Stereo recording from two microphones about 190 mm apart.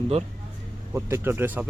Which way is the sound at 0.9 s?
15° right (ahead or behind).